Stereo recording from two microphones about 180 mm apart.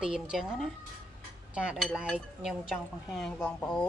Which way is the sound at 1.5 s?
5° right (ahead or behind).